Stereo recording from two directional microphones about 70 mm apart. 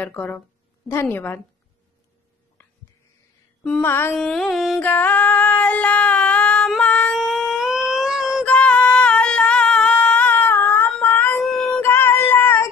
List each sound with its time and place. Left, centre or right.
0.0 s speech: left
0.8 s a woman's voice: left
1.1 s speech: left
3.8 s mantra: left
4.2 s music: centre
4.7 s female singing: left
6.8 s a sound: centre
7.2 s a sound: centre
8.5 s singing: centre
11.4 s a sound: centre
11.8 s music: left